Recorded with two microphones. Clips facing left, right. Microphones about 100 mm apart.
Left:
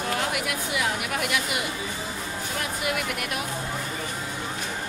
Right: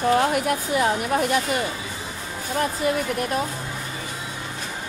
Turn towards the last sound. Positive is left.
turn(degrees=-35)  # may be behind; listen again after turning